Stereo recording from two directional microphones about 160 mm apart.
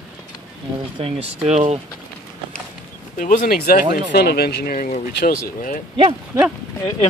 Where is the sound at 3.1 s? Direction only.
55° left (ahead or behind).